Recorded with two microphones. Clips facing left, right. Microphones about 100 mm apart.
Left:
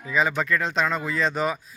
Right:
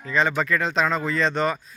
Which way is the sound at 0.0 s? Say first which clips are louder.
Right 1 dB; 5° left (ahead or behind).